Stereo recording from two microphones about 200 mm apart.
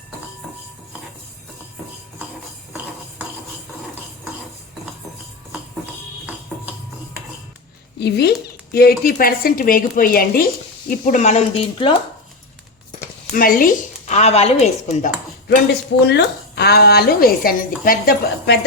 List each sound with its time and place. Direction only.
7.9 s speech: 55° left (ahead or behind); by 11.9 s 25° left (ahead or behind)
13.3 s a woman's voice: 45° left (ahead or behind)
16.0 s speech: 55° left (ahead or behind)